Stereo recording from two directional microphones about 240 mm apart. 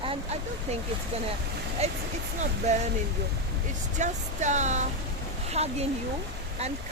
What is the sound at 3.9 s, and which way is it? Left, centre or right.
Speech, right.